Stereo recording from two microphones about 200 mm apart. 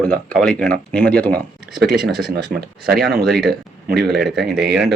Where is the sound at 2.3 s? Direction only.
50° right (ahead or behind).